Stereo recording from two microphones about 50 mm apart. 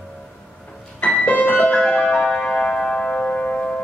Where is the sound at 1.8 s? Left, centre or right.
Left.